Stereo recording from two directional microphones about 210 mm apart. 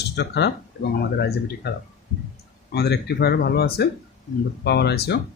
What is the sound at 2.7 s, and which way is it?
Speech, 50° left (ahead or behind).